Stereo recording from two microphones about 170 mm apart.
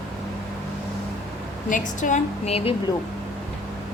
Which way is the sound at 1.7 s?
50° left (ahead or behind).